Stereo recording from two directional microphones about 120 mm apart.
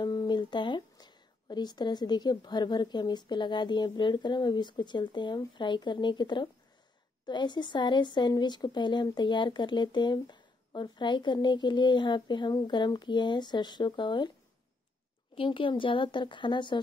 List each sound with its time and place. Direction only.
0.0 s a woman's voice: 35° left (ahead or behind)
15.3 s a woman's voice: 45° left (ahead or behind)